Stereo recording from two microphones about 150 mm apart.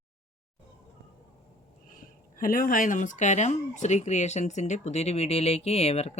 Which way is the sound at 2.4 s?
70° left (ahead or behind).